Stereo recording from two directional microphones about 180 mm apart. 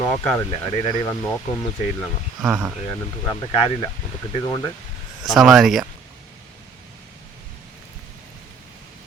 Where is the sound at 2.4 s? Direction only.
10° right (ahead or behind).